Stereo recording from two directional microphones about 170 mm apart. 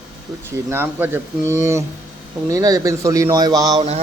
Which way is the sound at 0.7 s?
10° right (ahead or behind).